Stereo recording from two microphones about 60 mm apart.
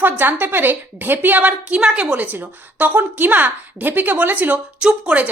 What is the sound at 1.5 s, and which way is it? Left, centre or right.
A woman's voice, centre.